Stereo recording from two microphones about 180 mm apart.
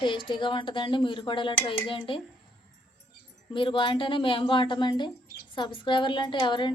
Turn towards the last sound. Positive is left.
turn(degrees=25)  # may be behind; listen again after turning